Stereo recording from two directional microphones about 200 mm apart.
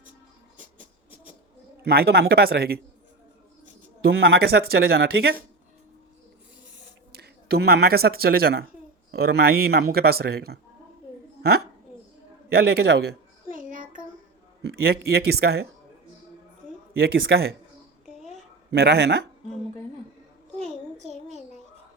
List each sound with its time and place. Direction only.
1.1 s a sound: 5° right (ahead or behind)
1.8 s speech: 50° right (ahead or behind)
4.0 s speech: 55° right (ahead or behind)
7.1 s speech: 50° right (ahead or behind)
12.5 s a sound: 50° right (ahead or behind)
14.6 s speech: 50° right (ahead or behind)
17.0 s speech: 50° right (ahead or behind)
18.7 s speech: 55° right (ahead or behind)
21.0 s a child's voice: 30° right (ahead or behind)